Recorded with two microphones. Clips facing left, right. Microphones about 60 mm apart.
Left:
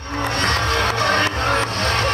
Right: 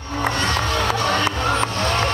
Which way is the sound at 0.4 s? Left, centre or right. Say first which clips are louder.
Left 4 dB; left.